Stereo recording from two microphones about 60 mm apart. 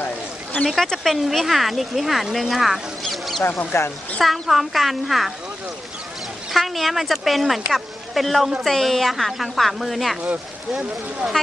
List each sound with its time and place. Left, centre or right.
0.0 s a sound: left
0.8 s speech: centre
3.4 s speech: left
4.2 s speech: centre
6.5 s speech: centre
10.7 s speech: centre